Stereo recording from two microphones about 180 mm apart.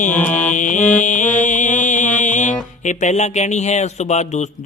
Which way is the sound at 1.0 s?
45° left (ahead or behind).